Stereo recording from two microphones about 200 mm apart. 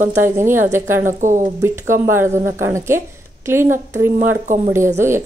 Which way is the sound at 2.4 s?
15° right (ahead or behind).